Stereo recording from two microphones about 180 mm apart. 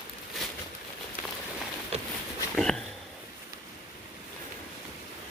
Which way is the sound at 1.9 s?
35° right (ahead or behind).